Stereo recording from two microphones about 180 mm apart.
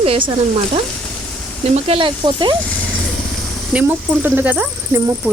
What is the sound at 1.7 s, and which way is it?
Speech, 30° right (ahead or behind).